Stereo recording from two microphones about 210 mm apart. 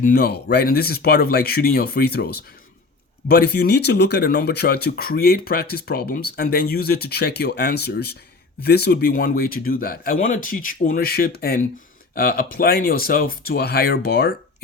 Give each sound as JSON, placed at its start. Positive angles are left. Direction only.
{"t": 0.0, "sound": "speech", "side_deg": 45}